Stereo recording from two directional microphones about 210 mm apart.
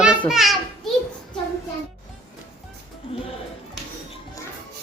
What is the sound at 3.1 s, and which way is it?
Speech, 25° left (ahead or behind).